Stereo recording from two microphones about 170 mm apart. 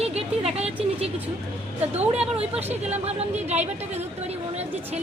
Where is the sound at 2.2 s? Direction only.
5° right (ahead or behind).